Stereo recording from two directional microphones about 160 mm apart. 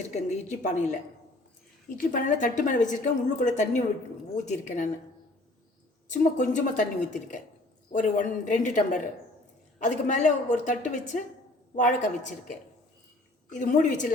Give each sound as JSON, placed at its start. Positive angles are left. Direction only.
{"t": 0.1, "sound": "a woman's voice", "side_deg": 45}
{"t": 2.0, "sound": "a woman's voice", "side_deg": 55}
{"t": 6.1, "sound": "a woman's voice", "side_deg": 50}
{"t": 13.5, "sound": "a woman's voice", "side_deg": 55}